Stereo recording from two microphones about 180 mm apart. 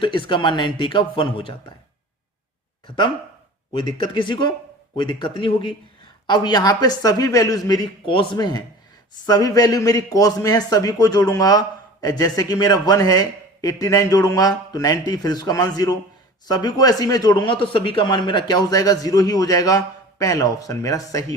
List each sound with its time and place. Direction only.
0.0 s speech: 30° left (ahead or behind)
2.8 s speech: 25° left (ahead or behind)